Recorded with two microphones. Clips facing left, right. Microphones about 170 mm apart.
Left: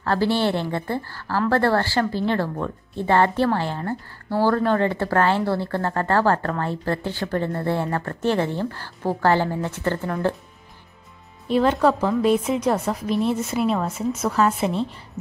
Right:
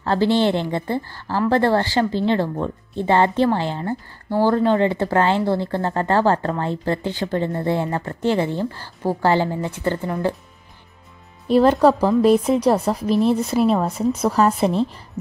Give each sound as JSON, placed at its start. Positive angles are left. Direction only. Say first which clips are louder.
{"t": 0.0, "sound": "a woman's voice", "louder": "right 3 dB", "side_deg": -20}
{"t": 11.4, "sound": "a woman's voice", "louder": "right 4 dB", "side_deg": -40}